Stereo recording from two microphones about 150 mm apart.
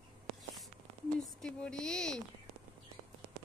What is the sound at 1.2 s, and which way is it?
A woman's voice, 5° left (ahead or behind).